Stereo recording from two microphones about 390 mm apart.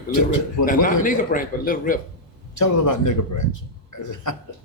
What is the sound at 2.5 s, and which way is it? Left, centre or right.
Speech, left.